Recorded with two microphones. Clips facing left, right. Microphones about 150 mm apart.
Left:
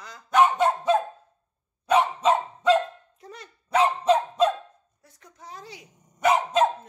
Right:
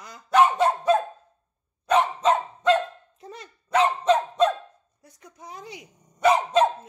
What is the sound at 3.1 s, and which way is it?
Dog, 25° right (ahead or behind).